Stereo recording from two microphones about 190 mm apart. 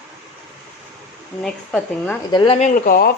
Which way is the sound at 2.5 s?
40° left (ahead or behind).